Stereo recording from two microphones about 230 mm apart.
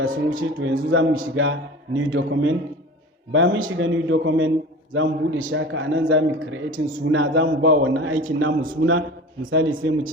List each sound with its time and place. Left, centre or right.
0.3 s a man's voice: right